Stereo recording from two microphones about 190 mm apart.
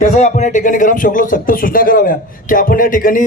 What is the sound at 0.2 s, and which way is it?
Speech, 40° left (ahead or behind).